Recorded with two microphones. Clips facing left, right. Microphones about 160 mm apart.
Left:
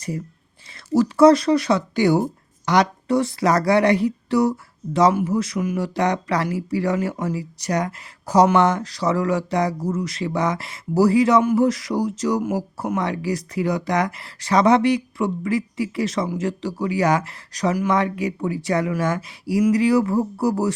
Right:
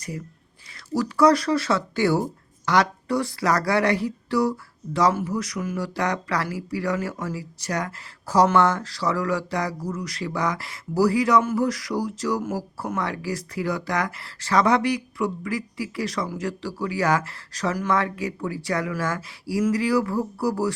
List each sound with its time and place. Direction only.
0.9 s speech: 25° left (ahead or behind)